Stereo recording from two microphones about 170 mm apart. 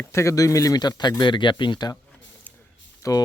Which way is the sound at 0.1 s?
15° left (ahead or behind).